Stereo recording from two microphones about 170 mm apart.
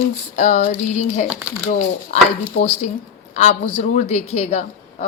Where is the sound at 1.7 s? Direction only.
45° left (ahead or behind).